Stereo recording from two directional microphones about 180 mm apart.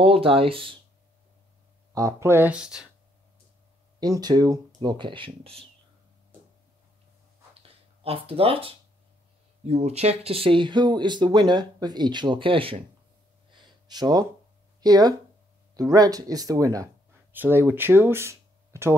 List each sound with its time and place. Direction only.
0.0 s speech: 30° right (ahead or behind)
2.0 s speech: 15° right (ahead or behind)
4.0 s speech: 20° right (ahead or behind)
7.5 s a sound: 30° right (ahead or behind)
9.7 s speech: 35° right (ahead or behind)
13.5 s a sound: 25° right (ahead or behind)
14.8 s speech: 20° right (ahead or behind)